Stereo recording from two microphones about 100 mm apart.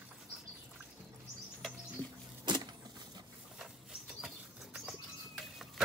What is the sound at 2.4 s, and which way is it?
Vehicle, 50° right (ahead or behind).